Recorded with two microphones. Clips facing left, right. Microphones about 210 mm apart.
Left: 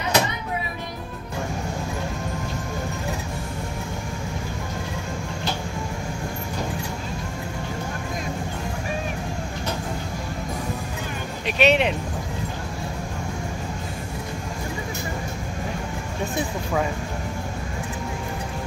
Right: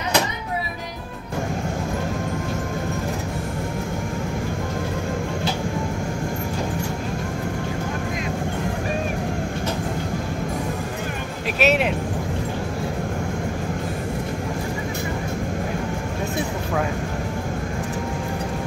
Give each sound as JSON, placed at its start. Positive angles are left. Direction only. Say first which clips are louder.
{"t": 11.6, "sound": "speech", "louder": "left 1 dB", "side_deg": -5}